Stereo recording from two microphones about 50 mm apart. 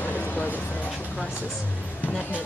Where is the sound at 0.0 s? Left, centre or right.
Left.